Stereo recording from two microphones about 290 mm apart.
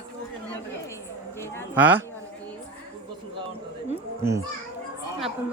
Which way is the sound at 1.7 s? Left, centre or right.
Centre.